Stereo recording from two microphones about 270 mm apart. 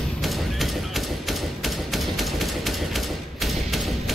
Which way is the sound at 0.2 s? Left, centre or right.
Centre.